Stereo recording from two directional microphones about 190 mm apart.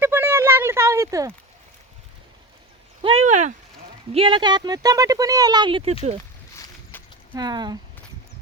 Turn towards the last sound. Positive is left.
turn(degrees=-20)  # may be behind; listen again after turning